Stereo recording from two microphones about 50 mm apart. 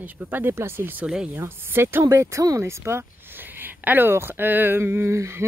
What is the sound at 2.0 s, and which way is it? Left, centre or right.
Speech, right.